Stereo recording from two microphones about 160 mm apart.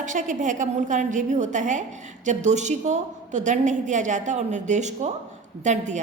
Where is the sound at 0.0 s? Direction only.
55° right (ahead or behind).